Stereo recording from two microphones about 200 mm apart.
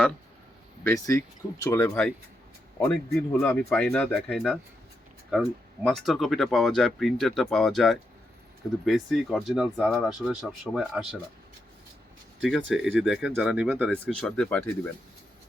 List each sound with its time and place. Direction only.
0.9 s speech: 15° left (ahead or behind); by 11.0 s centre (ahead or behind)
12.4 s speech: centre (ahead or behind)
14.2 s speech: 5° left (ahead or behind)